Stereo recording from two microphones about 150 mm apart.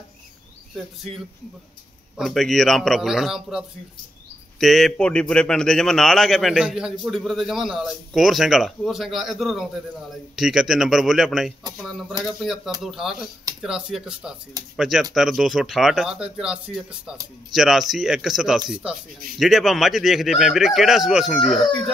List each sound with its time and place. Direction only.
2.1 s a man's voice: centre (ahead or behind)